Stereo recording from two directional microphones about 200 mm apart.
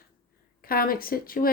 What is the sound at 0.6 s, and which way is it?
Speech, 45° left (ahead or behind).